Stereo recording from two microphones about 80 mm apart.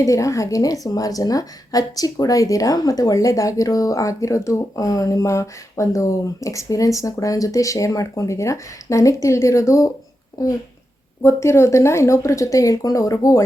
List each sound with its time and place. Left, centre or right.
0.0 s a woman's voice: left
11.2 s speech: left